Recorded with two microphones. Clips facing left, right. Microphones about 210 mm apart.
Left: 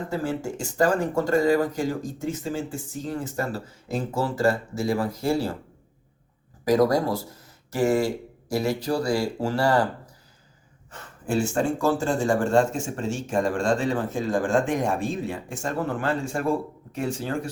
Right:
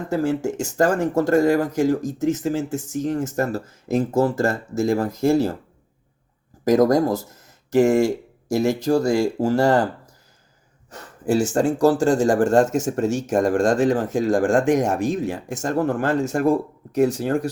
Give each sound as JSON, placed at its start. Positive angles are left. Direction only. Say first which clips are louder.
{"t": 0.1, "sound": "speech", "louder": "right 8 dB", "side_deg": -40}
{"t": 6.7, "sound": "speech", "louder": "right 4 dB", "side_deg": -45}
{"t": 11.3, "sound": "speech", "louder": "right 5 dB", "side_deg": -80}
{"t": 12.2, "sound": "speech", "louder": "right 2 dB", "side_deg": -45}
{"t": 14.1, "sound": "speech", "louder": "right 5 dB", "side_deg": -90}
{"t": 15.5, "sound": "speech", "louder": "right 7 dB", "side_deg": -40}